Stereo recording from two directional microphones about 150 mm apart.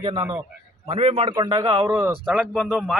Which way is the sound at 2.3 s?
5° right (ahead or behind).